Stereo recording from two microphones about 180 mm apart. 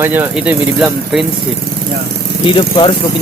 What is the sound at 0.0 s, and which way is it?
Speech, 10° right (ahead or behind).